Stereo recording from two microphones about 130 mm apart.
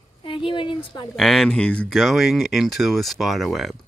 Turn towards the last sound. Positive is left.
turn(degrees=0)  # may be behind; listen again after turning